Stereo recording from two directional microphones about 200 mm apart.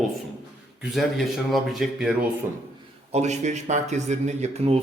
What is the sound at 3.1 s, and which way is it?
Speech, 35° right (ahead or behind).